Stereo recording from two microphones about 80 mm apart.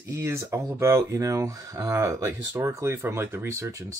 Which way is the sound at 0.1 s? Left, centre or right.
Right.